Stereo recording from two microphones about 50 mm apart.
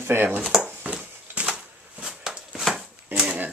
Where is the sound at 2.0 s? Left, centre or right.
Centre.